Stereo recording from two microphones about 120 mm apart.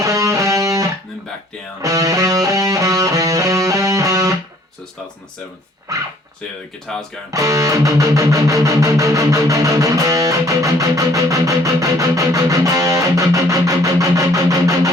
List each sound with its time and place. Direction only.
0.0 s music: 25° right (ahead or behind)
6.9 s speech: 5° left (ahead or behind)
7.3 s music: 25° right (ahead or behind)